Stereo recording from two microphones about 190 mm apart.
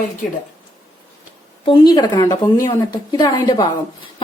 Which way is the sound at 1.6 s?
25° left (ahead or behind).